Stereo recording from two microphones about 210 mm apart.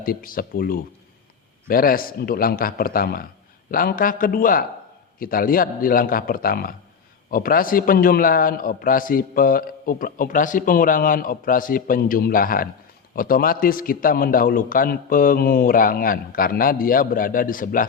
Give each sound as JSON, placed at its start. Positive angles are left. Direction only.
{"t": 0.0, "sound": "a man's voice", "side_deg": 40}